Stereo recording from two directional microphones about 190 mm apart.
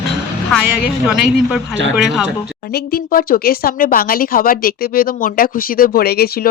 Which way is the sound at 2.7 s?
55° left (ahead or behind).